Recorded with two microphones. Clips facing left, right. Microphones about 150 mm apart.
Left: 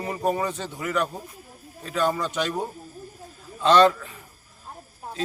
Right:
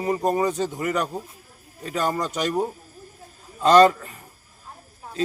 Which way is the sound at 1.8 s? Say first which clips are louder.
Left 1 dB; 40° right (ahead or behind).